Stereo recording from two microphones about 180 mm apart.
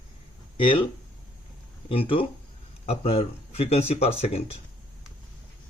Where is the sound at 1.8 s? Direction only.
30° left (ahead or behind).